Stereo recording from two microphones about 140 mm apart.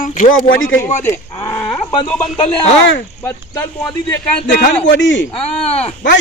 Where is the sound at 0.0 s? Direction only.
70° left (ahead or behind).